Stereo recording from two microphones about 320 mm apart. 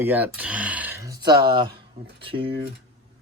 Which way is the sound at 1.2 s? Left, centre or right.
Right.